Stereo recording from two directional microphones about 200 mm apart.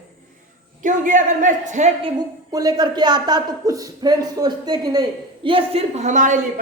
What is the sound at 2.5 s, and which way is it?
A woman's voice, 20° right (ahead or behind).